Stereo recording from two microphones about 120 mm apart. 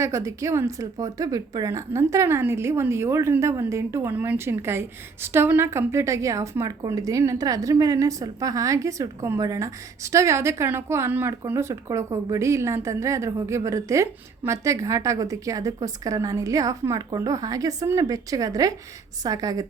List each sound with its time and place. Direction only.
0.0 s a woman's voice: 25° right (ahead or behind)